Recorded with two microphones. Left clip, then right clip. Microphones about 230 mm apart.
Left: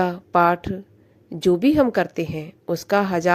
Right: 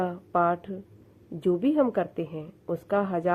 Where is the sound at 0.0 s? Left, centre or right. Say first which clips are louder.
Left 7 dB; left.